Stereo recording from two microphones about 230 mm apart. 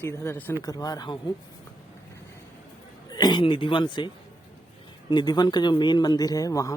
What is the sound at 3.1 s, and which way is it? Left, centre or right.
Speech, centre.